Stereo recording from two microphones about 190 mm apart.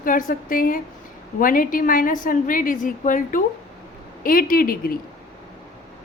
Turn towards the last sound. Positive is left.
turn(degrees=50)  # may be behind; listen again after turning